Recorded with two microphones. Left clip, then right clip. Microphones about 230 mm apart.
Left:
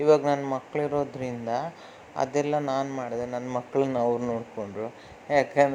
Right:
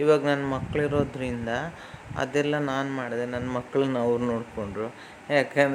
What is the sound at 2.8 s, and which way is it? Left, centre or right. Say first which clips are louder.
A man's voice: right 1 dB; centre.